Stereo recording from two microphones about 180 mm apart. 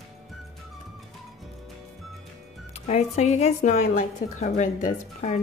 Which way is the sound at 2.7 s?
35° left (ahead or behind).